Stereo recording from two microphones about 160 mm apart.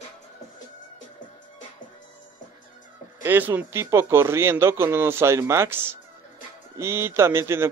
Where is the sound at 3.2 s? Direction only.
15° right (ahead or behind).